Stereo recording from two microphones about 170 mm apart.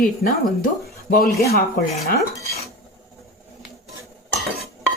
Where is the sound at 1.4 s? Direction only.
65° left (ahead or behind).